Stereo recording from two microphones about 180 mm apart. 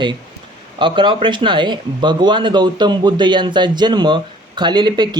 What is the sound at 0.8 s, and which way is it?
Speech, 25° right (ahead or behind).